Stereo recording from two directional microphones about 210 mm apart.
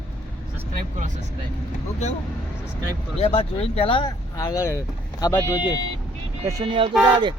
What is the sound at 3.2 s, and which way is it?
Speech, 30° left (ahead or behind).